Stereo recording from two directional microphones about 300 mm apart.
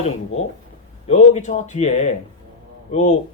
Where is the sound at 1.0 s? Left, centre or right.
Left.